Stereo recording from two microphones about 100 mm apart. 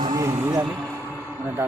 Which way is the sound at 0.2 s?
30° right (ahead or behind).